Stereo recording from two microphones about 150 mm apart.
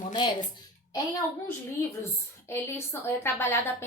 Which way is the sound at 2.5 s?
15° left (ahead or behind).